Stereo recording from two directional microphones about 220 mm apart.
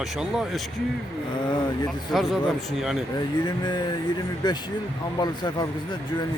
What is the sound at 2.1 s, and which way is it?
Speech, centre (ahead or behind).